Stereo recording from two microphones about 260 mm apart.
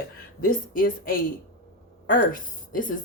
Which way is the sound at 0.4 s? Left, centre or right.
Left.